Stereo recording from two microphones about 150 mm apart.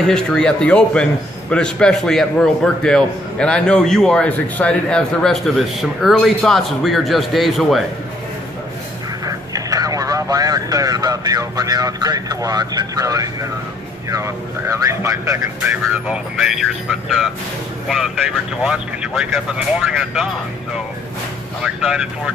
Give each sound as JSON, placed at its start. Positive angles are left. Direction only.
{"t": 0.0, "sound": "a man's voice", "side_deg": 5}
{"t": 9.2, "sound": "a man's voice", "side_deg": -25}
{"t": 17.8, "sound": "a man's voice", "side_deg": 0}
{"t": 21.6, "sound": "a man's voice", "side_deg": -5}